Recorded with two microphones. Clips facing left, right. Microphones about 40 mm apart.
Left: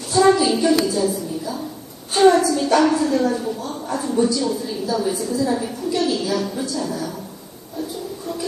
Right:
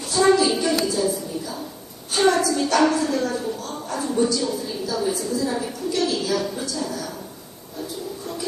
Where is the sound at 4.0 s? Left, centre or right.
Centre.